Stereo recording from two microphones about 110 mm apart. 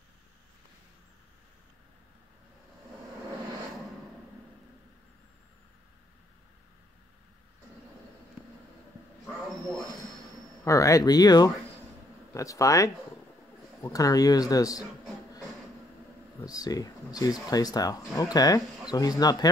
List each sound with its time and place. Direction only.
10.6 s speech: 30° left (ahead or behind)
16.3 s speech: 35° left (ahead or behind)